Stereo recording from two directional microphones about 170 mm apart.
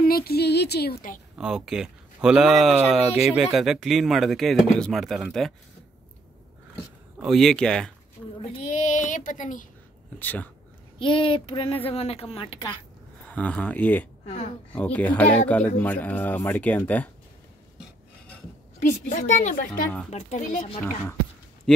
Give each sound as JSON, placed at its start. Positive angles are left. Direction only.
{"t": 0.0, "sound": "speech", "side_deg": 65}
{"t": 1.4, "sound": "speech", "side_deg": -5}
{"t": 7.2, "sound": "speech", "side_deg": 0}
{"t": 8.8, "sound": "a woman's voice", "side_deg": 50}
{"t": 10.1, "sound": "speech", "side_deg": 10}
{"t": 11.0, "sound": "a woman's voice", "side_deg": 30}
{"t": 13.2, "sound": "speech", "side_deg": 10}
{"t": 14.2, "sound": "speech", "side_deg": 40}
{"t": 14.7, "sound": "speech", "side_deg": 10}
{"t": 18.8, "sound": "a woman's voice", "side_deg": 50}
{"t": 21.7, "sound": "speech", "side_deg": 5}